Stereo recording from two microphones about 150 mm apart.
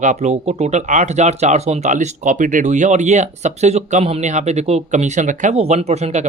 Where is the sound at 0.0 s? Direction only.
50° right (ahead or behind).